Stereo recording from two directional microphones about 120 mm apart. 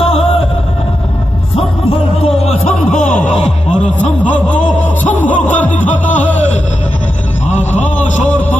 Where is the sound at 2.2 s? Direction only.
60° left (ahead or behind); by 3.2 s 85° left.